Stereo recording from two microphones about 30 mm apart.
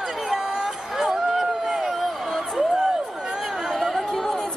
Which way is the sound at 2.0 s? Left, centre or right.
Centre.